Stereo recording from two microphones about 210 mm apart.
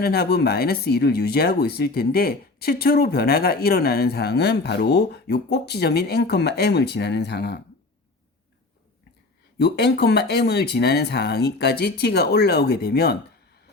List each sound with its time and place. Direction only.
0.0 s speech: 50° left (ahead or behind)
9.6 s speech: 50° left (ahead or behind)